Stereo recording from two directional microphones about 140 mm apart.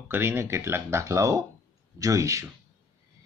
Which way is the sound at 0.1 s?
15° right (ahead or behind).